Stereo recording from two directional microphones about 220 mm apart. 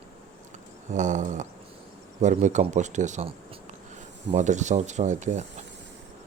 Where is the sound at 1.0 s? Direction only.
35° right (ahead or behind).